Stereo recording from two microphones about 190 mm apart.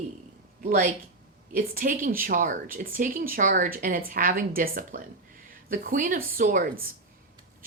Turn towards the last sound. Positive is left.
turn(degrees=-45)  # may be behind; listen again after turning